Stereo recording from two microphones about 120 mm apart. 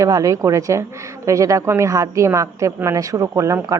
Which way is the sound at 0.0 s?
30° right (ahead or behind).